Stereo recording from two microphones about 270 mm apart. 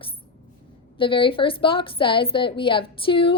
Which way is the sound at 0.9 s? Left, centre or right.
Centre.